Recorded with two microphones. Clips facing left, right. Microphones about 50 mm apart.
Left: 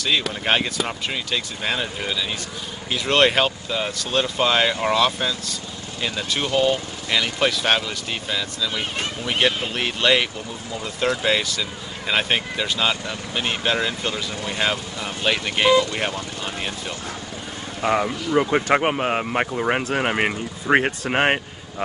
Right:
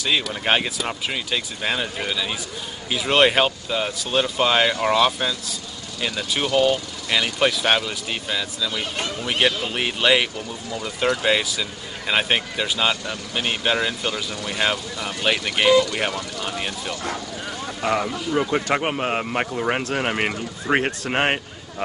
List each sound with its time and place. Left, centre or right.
0.3 s speech: centre
10.8 s speech: centre
11.2 s speech: centre
15.2 s speech: centre
15.7 s speech: left
16.4 s speech: centre
17.8 s speech: centre